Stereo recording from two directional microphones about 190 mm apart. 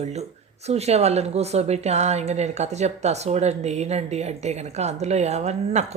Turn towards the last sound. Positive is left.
turn(degrees=-35)  # may be behind; listen again after turning